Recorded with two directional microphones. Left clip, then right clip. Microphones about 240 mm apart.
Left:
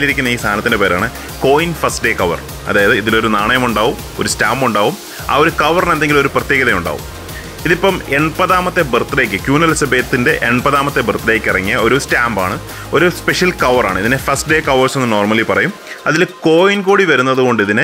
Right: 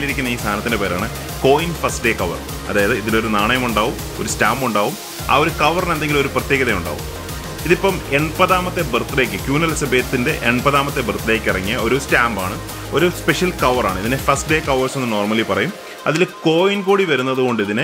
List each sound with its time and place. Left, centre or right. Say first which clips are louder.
0.0 s speech: left 7 dB; centre